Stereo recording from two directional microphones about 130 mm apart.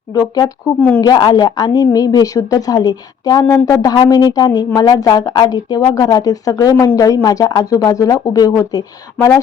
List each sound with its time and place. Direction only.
0.2 s a woman's voice: 25° left (ahead or behind)
0.8 s speech: 15° left (ahead or behind)
1.0 s a woman's voice: 30° left (ahead or behind)